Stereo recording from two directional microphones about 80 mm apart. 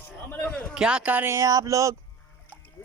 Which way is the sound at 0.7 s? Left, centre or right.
Centre.